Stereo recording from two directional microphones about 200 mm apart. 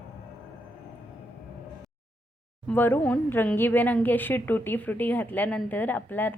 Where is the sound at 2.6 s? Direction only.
10° left (ahead or behind).